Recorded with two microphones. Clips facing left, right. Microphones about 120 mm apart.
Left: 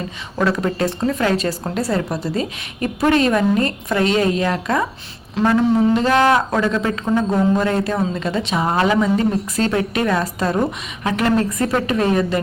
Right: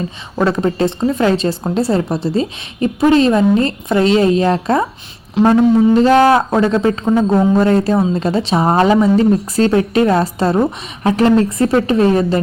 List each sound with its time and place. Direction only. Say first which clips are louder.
0.3 s a woman's voice: right 4 dB; 25° right (ahead or behind)
6.0 s a woman's voice: right 5 dB; 35° right (ahead or behind)
7.0 s speech: right 5 dB; 20° right (ahead or behind)
7.3 s a woman's voice: right 6 dB; 30° right (ahead or behind)